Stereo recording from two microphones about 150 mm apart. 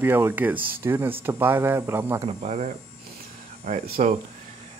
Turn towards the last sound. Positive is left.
turn(degrees=-55)  # may be behind; listen again after turning